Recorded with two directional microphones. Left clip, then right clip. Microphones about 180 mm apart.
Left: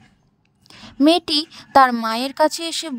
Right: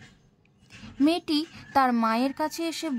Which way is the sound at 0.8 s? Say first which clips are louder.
Left 9 dB; 45° left (ahead or behind).